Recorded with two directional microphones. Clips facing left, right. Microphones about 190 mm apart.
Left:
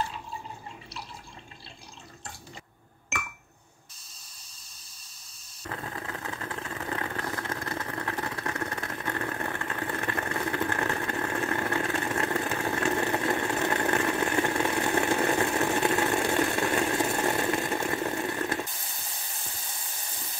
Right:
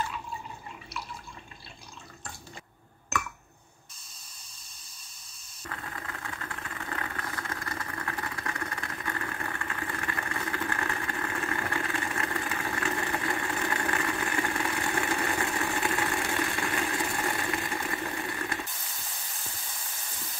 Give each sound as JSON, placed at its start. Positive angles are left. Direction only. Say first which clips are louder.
{"t": 5.7, "sound": "vehicle", "louder": "left 4 dB", "side_deg": 30}
{"t": 15.6, "sound": "chainsaw", "louder": "left 5 dB", "side_deg": 25}
{"t": 16.5, "sound": "vehicle", "louder": "left 5 dB", "side_deg": 25}